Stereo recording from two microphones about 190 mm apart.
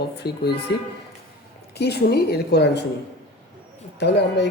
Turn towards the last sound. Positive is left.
turn(degrees=65)  # may be behind; listen again after turning